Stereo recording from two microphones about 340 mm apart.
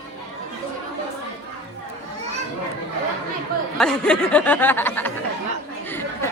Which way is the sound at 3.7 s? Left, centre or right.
Centre.